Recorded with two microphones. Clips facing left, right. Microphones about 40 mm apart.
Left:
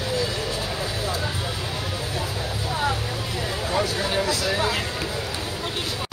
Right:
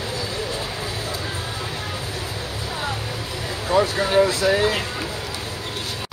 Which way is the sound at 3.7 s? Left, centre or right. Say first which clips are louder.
Right 7 dB; right.